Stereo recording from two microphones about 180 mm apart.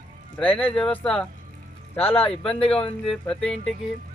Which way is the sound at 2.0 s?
30° left (ahead or behind).